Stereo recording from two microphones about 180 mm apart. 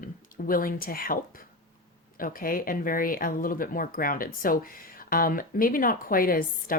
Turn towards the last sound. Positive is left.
turn(degrees=55)  # may be behind; listen again after turning